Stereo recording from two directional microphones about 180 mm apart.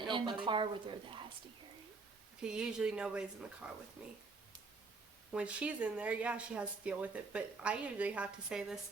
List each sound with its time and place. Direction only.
0.1 s speech: 25° right (ahead or behind)
2.4 s speech: 5° right (ahead or behind)
5.3 s speech: 5° right (ahead or behind)